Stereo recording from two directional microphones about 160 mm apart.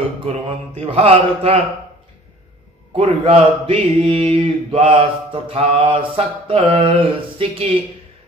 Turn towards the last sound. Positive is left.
turn(degrees=-35)  # may be behind; listen again after turning